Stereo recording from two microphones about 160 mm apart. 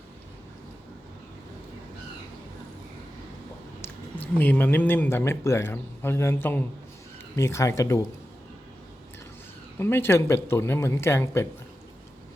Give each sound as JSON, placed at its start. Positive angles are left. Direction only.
{"t": 4.4, "sound": "speech", "side_deg": 10}
{"t": 9.7, "sound": "speech", "side_deg": 15}